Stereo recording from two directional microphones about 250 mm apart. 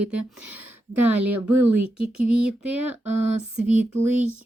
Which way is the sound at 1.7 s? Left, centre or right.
Right.